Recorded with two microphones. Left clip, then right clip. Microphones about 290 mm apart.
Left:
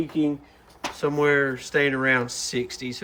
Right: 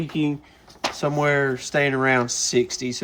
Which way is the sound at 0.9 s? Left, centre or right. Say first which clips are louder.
Left 1 dB; centre.